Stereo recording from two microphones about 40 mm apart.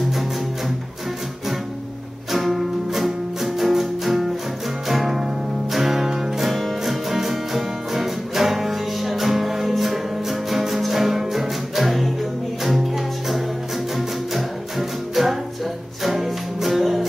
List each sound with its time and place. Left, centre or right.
2.3 s music: centre